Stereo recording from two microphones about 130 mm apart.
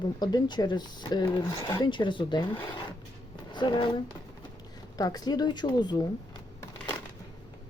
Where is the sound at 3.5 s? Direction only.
35° left (ahead or behind).